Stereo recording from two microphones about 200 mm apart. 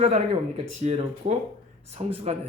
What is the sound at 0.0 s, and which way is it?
Speech, 30° right (ahead or behind).